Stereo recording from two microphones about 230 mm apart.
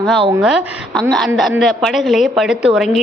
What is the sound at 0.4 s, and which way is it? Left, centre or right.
A woman's voice, centre.